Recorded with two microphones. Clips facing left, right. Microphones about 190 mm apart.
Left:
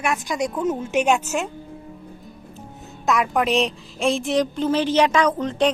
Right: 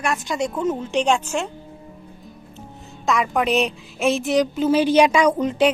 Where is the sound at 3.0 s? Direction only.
Centre (ahead or behind).